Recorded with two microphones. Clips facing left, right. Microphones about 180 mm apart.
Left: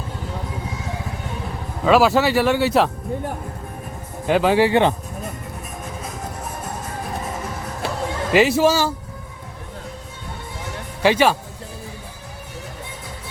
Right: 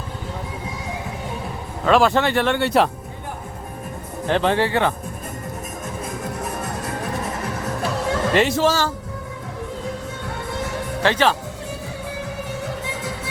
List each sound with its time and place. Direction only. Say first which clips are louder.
1.8 s speech: left 1 dB; 5° left (ahead or behind)
4.3 s speech: left 3 dB; 10° left (ahead or behind)
6.4 s music: right 3 dB; 80° right
8.3 s speech: left 4 dB; 5° left (ahead or behind)
11.0 s speech: left 3 dB; 10° left (ahead or behind)
12.8 s music: right 7 dB; 90° right